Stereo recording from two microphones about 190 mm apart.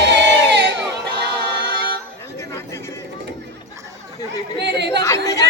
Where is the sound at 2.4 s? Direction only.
15° left (ahead or behind).